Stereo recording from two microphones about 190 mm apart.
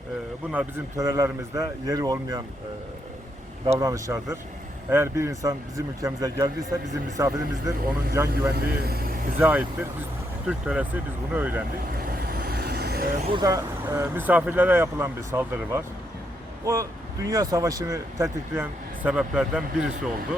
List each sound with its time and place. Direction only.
0.5 s speech: 15° right (ahead or behind)
3.7 s speech: 15° right (ahead or behind)
8.3 s speech: 55° right (ahead or behind)
9.4 s speech: 10° right (ahead or behind)
11.9 s vehicle: 50° right (ahead or behind)
13.3 s speech: 15° right (ahead or behind)